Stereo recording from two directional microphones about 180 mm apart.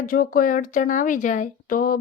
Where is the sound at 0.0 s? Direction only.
50° left (ahead or behind).